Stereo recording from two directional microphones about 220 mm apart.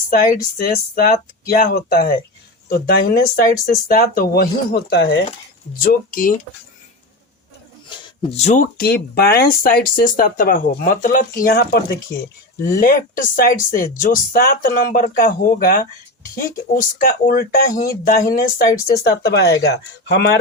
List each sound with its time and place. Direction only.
0.6 s a woman's voice: 40° left (ahead or behind)
7.9 s a sound: 25° left (ahead or behind)
8.8 s a woman's voice: 45° left (ahead or behind)